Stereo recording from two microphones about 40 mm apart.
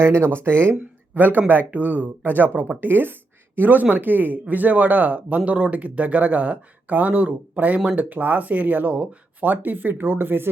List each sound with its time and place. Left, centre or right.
0.0 s speech: right
1.1 s speech: right